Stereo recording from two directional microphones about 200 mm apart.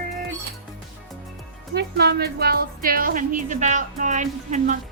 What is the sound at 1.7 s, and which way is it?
A woman's voice, 55° right (ahead or behind).